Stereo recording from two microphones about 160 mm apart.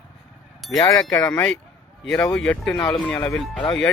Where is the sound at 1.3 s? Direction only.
5° left (ahead or behind).